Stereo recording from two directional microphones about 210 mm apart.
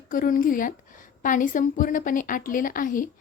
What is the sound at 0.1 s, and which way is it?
A woman's voice, 40° left (ahead or behind).